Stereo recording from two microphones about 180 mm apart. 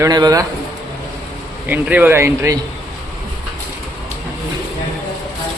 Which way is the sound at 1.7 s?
10° right (ahead or behind).